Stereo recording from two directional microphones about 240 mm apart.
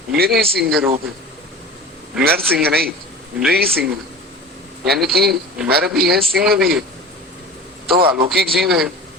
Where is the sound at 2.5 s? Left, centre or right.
Right.